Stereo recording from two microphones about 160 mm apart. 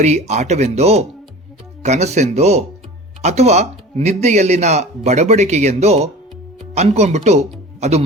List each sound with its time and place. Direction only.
0.0 s speech: 45° right (ahead or behind)
7.8 s music: 45° right (ahead or behind)